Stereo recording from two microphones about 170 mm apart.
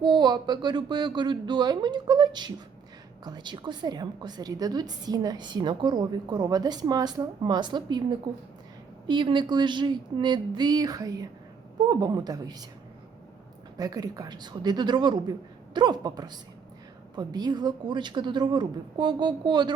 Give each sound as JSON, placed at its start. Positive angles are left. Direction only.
{"t": 0.0, "sound": "a woman's voice", "side_deg": -25}
{"t": 13.7, "sound": "a woman's voice", "side_deg": -20}